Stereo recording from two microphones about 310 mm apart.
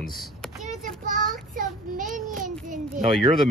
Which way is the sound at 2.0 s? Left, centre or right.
Right.